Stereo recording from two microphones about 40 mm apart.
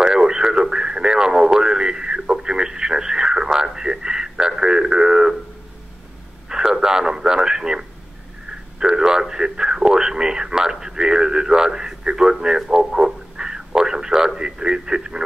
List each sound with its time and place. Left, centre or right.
0.0 s radio: centre
6.5 s radio: centre
8.7 s a sound: centre